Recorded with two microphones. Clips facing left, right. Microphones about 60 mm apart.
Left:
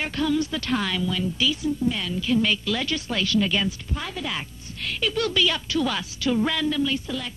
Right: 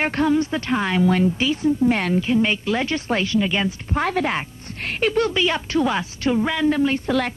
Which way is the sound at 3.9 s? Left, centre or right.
Right.